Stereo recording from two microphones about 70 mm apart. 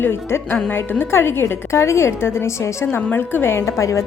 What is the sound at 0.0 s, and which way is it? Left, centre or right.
Speech, left.